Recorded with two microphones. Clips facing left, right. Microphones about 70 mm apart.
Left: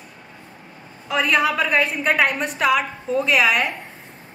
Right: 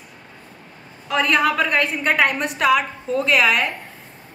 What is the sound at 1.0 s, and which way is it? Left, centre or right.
A woman's voice, centre.